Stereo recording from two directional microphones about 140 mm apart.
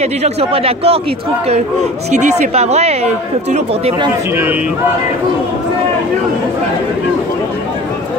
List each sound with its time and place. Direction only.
0.0 s a man's voice: 45° right (ahead or behind)
2.0 s a man's voice: 55° right (ahead or behind)